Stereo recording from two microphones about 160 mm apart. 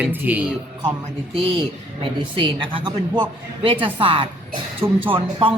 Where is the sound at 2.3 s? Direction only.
30° right (ahead or behind).